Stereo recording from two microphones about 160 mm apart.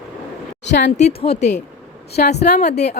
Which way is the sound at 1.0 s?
40° left (ahead or behind).